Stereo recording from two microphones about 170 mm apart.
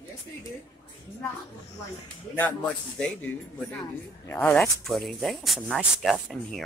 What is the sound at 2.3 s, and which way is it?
Speech, 10° left (ahead or behind).